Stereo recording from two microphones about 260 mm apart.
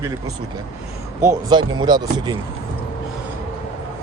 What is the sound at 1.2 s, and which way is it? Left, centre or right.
Speech, centre.